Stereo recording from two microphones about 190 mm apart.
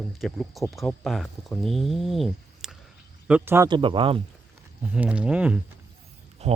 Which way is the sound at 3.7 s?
25° right (ahead or behind).